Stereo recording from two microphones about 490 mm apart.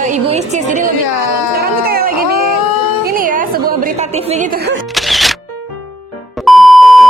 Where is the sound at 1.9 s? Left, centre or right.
Centre.